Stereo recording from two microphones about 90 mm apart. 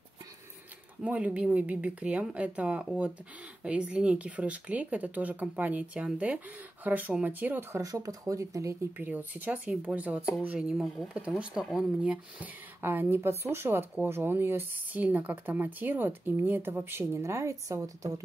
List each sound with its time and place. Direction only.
1.0 s speech: 15° right (ahead or behind)
7.7 s speech: 40° right (ahead or behind)
8.9 s speech: 20° right (ahead or behind); by 18.2 s 40° right (ahead or behind)